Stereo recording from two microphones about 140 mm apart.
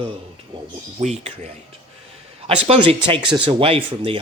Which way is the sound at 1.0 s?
50° right (ahead or behind).